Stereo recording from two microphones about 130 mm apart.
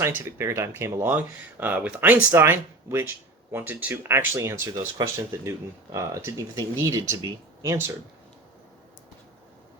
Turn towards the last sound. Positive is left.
turn(degrees=-20)  # may be behind; listen again after turning